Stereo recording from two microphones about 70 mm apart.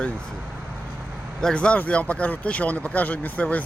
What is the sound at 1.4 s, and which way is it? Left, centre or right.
Speech, centre.